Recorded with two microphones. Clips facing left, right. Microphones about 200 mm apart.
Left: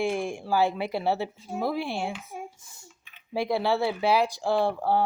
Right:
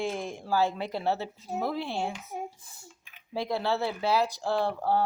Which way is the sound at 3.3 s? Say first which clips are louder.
Left 4 dB; 10° left (ahead or behind).